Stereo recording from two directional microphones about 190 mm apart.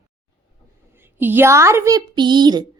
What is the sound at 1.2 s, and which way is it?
Speech, 10° right (ahead or behind).